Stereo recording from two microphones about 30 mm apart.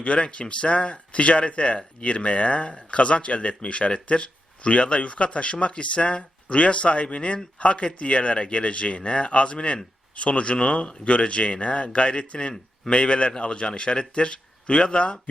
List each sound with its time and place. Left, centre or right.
0.0 s speech: left